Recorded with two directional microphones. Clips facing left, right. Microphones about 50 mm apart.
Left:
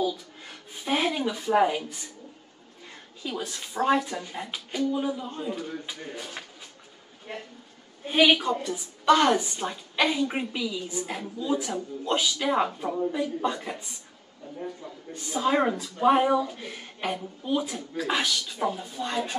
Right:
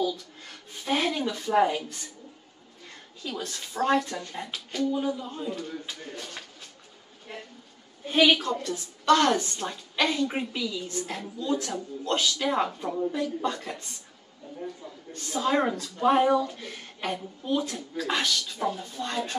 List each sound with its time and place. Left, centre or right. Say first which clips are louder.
0.0 s a woman's voice: left 1 dB; centre
7.3 s speech: left 3 dB; left
8.1 s a woman's voice: left 1 dB; centre
15.1 s a woman's voice: left 1 dB; centre